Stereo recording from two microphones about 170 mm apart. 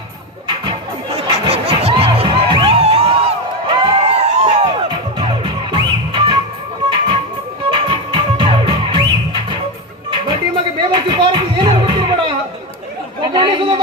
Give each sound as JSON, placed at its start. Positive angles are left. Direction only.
{"t": 0.4, "sound": "music", "side_deg": -30}
{"t": 4.6, "sound": "music", "side_deg": -25}
{"t": 7.7, "sound": "music", "side_deg": -30}
{"t": 13.2, "sound": "chatter", "side_deg": -25}